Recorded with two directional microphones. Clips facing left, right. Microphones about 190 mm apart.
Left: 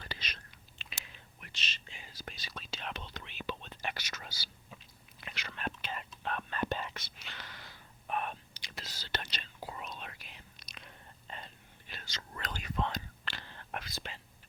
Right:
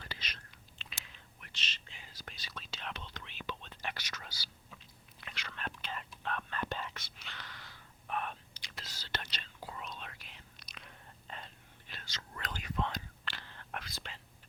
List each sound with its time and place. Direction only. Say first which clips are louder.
1.9 s whispering: left 4 dB; 15° left (ahead or behind)
12.4 s whispering: left 1 dB; 30° left (ahead or behind); by 14.2 s 10° left (ahead or behind)